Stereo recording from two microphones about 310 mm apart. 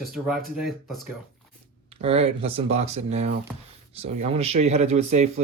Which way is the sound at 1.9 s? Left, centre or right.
Centre.